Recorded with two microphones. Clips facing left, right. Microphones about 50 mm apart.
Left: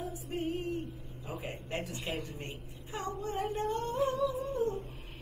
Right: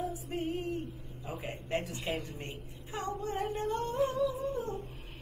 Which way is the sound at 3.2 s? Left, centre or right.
Centre.